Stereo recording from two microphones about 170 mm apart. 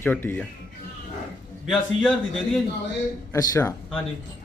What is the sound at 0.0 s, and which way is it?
Speech, 10° left (ahead or behind).